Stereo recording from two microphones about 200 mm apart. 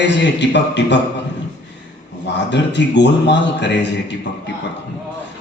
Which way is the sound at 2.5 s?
60° left (ahead or behind).